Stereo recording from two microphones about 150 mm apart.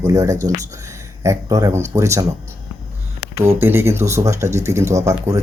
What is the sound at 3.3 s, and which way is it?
Speech, 15° right (ahead or behind).